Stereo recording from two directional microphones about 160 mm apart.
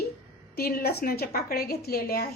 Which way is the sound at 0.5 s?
75° left (ahead or behind).